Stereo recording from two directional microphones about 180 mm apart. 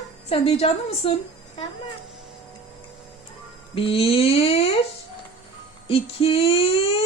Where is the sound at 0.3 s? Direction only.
35° left (ahead or behind).